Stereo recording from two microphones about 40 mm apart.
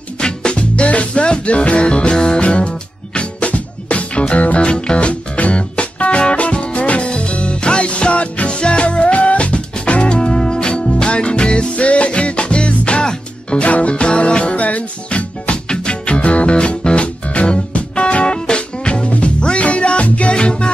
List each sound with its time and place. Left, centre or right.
0.2 s music: left
2.4 s music: left